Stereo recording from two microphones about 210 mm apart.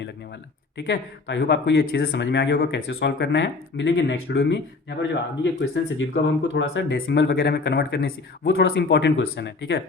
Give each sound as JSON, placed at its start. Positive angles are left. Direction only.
{"t": 0.8, "sound": "speech", "side_deg": 55}